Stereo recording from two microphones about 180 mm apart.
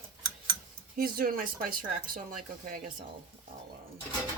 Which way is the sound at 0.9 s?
50° right (ahead or behind).